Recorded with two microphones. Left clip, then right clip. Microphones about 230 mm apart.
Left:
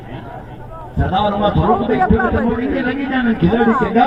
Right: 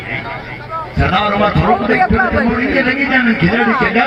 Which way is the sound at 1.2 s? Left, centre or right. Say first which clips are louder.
Even; right.